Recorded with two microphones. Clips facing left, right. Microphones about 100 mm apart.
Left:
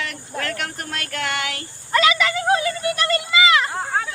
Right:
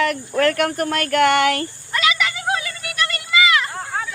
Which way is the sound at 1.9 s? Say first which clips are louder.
Left 4 dB; 35° left (ahead or behind).